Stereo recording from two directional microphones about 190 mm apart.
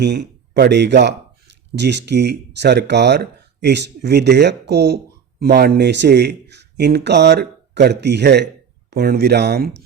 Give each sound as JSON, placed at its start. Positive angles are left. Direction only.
{"t": 0.0, "sound": "speech", "side_deg": -65}